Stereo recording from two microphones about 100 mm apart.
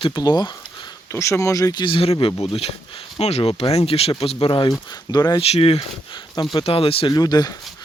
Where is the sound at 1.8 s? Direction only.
60° left (ahead or behind).